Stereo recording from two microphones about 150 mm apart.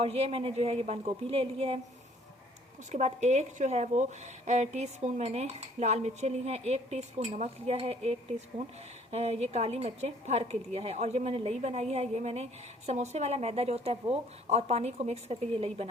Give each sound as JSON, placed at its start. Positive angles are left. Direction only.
{"t": 0.0, "sound": "a woman's voice", "side_deg": -40}
{"t": 2.9, "sound": "a woman's voice", "side_deg": -50}